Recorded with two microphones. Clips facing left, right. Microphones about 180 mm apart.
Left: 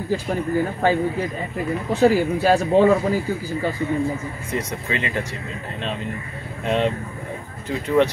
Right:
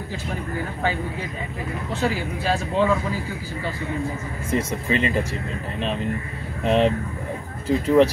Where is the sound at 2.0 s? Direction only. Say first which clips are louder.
Left 9 dB; 55° left (ahead or behind).